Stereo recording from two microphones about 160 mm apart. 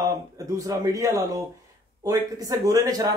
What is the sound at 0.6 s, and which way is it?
A man's voice, 20° right (ahead or behind).